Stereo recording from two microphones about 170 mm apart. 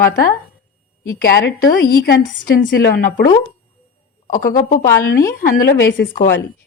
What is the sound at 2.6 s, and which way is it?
Speech, 80° left.